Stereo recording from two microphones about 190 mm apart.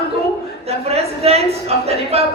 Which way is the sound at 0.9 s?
35° right (ahead or behind).